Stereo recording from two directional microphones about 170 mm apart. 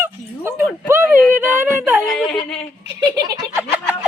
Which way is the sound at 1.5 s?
Centre (ahead or behind).